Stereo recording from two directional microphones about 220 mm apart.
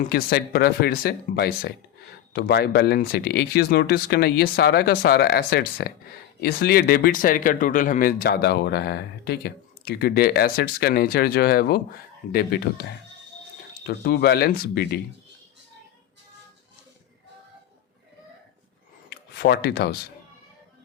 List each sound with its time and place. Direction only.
0.0 s speech: 45° left (ahead or behind)
13.8 s speech: 45° left (ahead or behind)
19.1 s speech: 45° left (ahead or behind)